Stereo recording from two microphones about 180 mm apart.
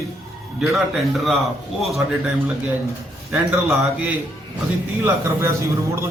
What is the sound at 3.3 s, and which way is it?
Speech, 5° right (ahead or behind).